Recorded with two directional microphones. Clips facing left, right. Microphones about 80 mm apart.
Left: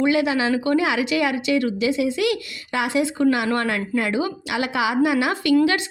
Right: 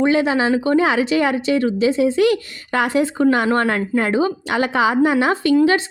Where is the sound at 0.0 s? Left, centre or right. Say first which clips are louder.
Right 3 dB; right.